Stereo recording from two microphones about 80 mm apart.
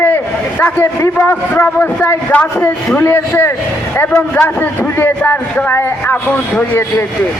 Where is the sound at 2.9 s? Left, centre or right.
Left.